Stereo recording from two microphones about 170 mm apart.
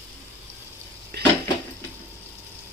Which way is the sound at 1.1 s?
70° right (ahead or behind).